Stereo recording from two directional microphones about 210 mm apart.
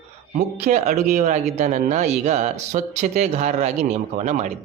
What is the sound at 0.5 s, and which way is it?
Speech, 35° right (ahead or behind).